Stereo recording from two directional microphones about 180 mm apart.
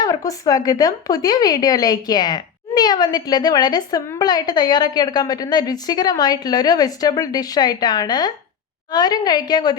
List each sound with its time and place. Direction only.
0.0 s a woman's voice: 20° left (ahead or behind)